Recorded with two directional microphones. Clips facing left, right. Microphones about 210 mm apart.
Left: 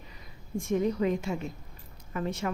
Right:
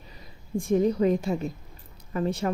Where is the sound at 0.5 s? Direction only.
35° right (ahead or behind).